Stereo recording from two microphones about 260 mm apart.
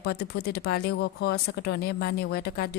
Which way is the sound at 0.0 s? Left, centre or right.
Left.